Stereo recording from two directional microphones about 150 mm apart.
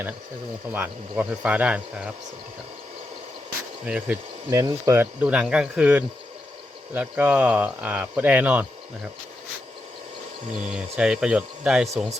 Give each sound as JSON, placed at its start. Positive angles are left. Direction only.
{"t": 0.7, "sound": "speech", "side_deg": -10}
{"t": 3.8, "sound": "speech", "side_deg": -5}
{"t": 4.5, "sound": "speech", "side_deg": -20}
{"t": 5.2, "sound": "speech", "side_deg": -5}
{"t": 10.7, "sound": "speech", "side_deg": -5}